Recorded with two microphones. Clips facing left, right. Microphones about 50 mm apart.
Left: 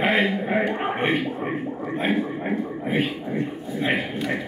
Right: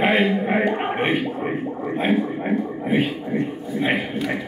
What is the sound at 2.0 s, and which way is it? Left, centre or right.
A man's voice, centre.